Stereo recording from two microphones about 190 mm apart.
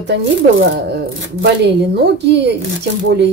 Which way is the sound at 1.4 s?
60° right (ahead or behind).